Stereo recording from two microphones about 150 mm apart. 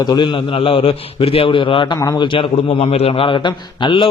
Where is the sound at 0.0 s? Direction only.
30° left (ahead or behind).